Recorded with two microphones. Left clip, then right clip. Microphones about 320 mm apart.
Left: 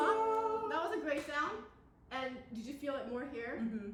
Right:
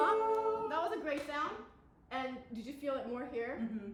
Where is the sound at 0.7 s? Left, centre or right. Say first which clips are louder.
Even; centre.